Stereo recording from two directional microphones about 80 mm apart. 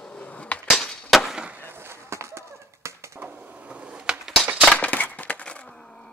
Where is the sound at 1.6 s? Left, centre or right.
Right.